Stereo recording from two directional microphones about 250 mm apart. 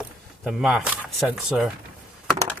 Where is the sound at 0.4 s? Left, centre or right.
Centre.